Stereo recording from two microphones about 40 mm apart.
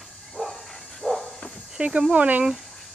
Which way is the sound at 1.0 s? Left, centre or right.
Centre.